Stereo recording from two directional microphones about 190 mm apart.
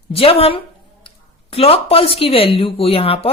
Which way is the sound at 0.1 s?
30° left (ahead or behind).